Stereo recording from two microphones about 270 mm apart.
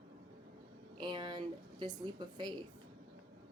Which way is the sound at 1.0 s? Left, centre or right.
Centre.